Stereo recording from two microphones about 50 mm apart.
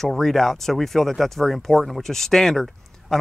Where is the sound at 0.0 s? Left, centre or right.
Centre.